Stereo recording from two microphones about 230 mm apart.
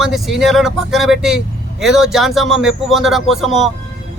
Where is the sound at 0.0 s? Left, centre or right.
Centre.